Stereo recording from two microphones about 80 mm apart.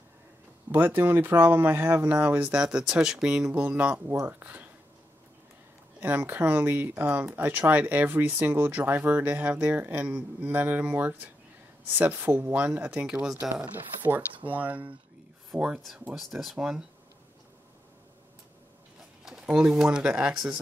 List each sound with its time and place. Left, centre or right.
0.7 s speech: right; by 3.6 s centre
3.7 s speech: right
5.9 s speech: right; by 13.7 s centre
13.7 s speech: right
15.5 s speech: centre
19.2 s speech: centre